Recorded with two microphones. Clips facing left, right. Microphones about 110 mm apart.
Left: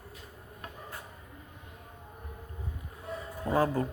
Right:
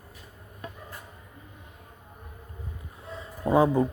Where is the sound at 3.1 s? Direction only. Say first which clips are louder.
Right 6 dB; 20° right (ahead or behind).